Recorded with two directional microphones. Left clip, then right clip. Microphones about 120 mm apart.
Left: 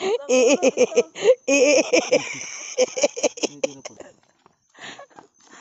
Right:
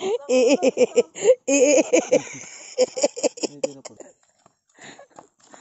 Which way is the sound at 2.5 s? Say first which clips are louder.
Even; 5° right (ahead or behind).